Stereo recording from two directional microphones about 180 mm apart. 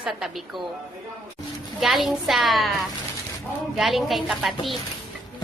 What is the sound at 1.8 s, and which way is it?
Speech, centre (ahead or behind).